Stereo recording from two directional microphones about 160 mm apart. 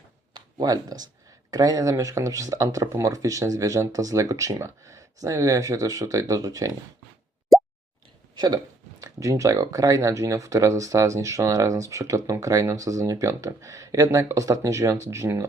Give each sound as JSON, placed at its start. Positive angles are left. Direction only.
{"t": 0.3, "sound": "speech", "side_deg": -25}
{"t": 9.0, "sound": "speech", "side_deg": -20}